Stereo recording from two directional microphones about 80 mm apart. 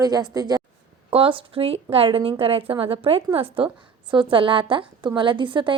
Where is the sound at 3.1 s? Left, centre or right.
Right.